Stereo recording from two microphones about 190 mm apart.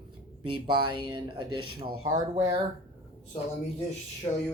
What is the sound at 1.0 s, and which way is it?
Speech, 25° right (ahead or behind).